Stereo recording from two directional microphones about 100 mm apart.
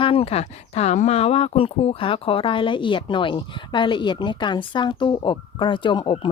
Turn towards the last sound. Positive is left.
turn(degrees=55)  # may be behind; listen again after turning